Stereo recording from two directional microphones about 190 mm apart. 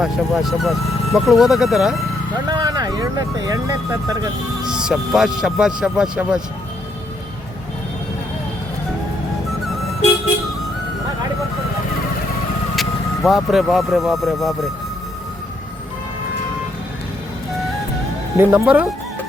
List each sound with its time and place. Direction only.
0.0 s speech: centre (ahead or behind)
2.5 s speech: 20° right (ahead or behind)
4.7 s speech: 5° right (ahead or behind)
12.7 s speech: centre (ahead or behind)
18.3 s speech: 10° right (ahead or behind)